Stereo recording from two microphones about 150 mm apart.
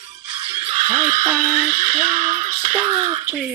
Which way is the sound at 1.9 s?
45° right (ahead or behind).